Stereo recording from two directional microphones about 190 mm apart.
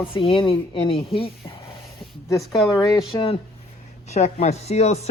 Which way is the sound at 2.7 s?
20° left (ahead or behind).